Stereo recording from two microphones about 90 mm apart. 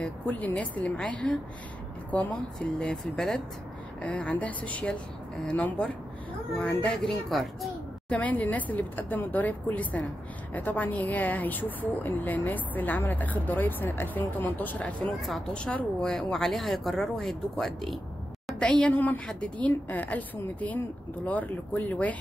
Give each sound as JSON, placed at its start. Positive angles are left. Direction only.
{"t": 0.0, "sound": "speech", "side_deg": 20}
{"t": 2.8, "sound": "speech", "side_deg": 5}
{"t": 7.2, "sound": "speech", "side_deg": 0}
{"t": 8.1, "sound": "speech", "side_deg": 15}